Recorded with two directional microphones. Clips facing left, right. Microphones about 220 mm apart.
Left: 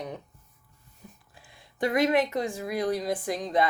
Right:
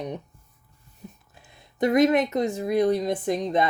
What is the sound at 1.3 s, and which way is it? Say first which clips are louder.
Speech: right 1 dB; 20° right (ahead or behind).